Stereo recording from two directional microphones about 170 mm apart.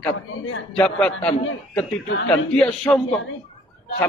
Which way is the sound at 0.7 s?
5° left (ahead or behind).